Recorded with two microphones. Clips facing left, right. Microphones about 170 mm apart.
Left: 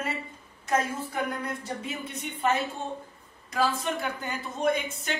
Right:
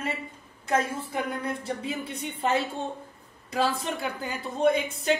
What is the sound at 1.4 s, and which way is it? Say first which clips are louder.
A woman's voice: right 3 dB; 30° right (ahead or behind).